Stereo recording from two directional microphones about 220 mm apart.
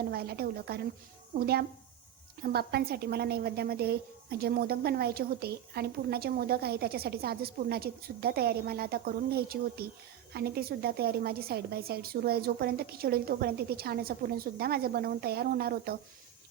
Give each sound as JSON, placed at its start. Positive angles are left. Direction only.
{"t": 0.1, "sound": "a woman's voice", "side_deg": -45}